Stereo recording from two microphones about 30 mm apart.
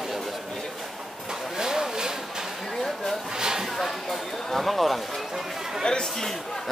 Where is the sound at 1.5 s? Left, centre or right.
Centre.